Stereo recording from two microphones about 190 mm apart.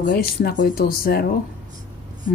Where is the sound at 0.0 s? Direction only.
50° left (ahead or behind).